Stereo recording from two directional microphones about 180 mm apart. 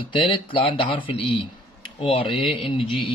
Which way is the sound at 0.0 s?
30° left (ahead or behind).